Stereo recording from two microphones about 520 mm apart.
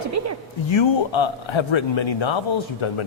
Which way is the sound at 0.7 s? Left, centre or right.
Left.